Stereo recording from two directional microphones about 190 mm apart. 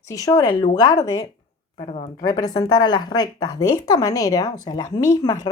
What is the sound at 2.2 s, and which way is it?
A woman's voice, 20° left (ahead or behind).